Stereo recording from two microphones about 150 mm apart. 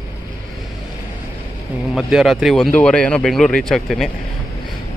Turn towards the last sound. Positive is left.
turn(degrees=0)  # may be behind; listen again after turning